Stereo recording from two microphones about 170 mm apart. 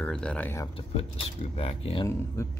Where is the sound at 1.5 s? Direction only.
35° left (ahead or behind).